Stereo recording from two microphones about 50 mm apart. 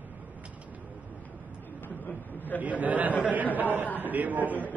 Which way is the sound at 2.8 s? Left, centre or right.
Right.